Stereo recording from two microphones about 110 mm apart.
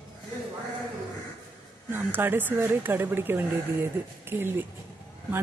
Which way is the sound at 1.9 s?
20° right (ahead or behind).